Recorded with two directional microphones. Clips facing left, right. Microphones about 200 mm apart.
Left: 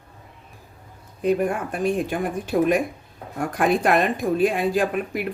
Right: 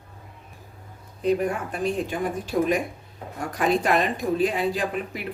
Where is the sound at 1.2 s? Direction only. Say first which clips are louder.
Left 2 dB; 55° left (ahead or behind).